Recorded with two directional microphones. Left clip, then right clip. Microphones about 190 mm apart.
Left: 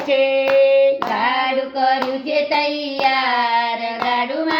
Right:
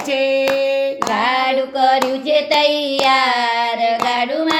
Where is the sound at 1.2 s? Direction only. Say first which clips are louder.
Right 3 dB; 40° right (ahead or behind).